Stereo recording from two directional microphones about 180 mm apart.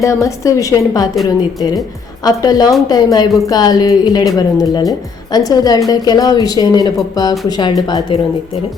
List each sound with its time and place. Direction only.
0.0 s a woman's voice: 15° left (ahead or behind)